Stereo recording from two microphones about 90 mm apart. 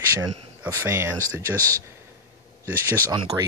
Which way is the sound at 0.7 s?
30° right (ahead or behind).